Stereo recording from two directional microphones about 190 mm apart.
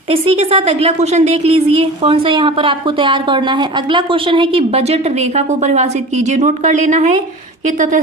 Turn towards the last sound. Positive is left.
turn(degrees=-40)  # may be behind; listen again after turning